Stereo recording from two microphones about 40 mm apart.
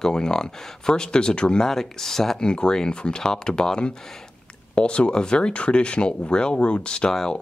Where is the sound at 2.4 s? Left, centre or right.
Left.